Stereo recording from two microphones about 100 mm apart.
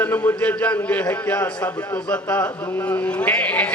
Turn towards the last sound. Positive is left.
turn(degrees=15)  # may be behind; listen again after turning